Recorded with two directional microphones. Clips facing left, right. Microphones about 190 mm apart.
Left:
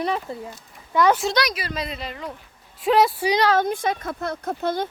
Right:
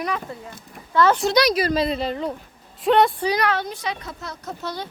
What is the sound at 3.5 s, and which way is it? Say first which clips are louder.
Speech: left 5 dB; 50° left (ahead or behind).